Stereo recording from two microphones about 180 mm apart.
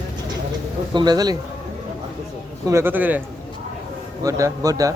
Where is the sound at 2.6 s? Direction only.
15° right (ahead or behind).